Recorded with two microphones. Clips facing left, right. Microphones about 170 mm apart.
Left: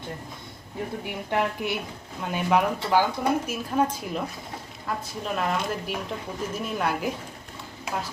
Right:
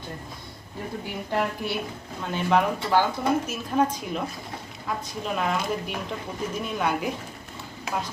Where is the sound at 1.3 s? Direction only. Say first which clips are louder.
Left 1 dB; 15° left (ahead or behind).